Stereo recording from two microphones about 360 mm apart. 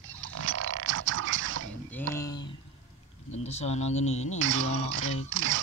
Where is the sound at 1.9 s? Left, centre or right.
Centre.